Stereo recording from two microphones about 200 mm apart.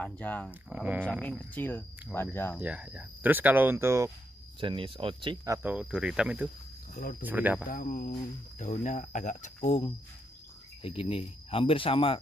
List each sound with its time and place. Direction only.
0.0 s speech: 5° left (ahead or behind)
0.5 s speech: 5° right (ahead or behind)
1.2 s speech: 5° left (ahead or behind)
2.6 s speech: 5° right (ahead or behind)
4.6 s speech: 25° right (ahead or behind); by 6.5 s 5° right (ahead or behind)
6.9 s speech: 45° left (ahead or behind)
7.2 s speech: 10° right (ahead or behind)
7.6 s speech: 45° left (ahead or behind); by 12.2 s 25° left (ahead or behind)